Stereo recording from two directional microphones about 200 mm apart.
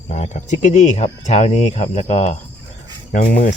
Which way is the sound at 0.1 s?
35° left (ahead or behind).